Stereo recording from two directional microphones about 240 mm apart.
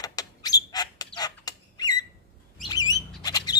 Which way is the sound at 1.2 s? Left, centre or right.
Centre.